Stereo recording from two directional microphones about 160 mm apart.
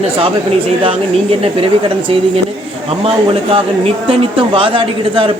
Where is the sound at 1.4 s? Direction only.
35° right (ahead or behind).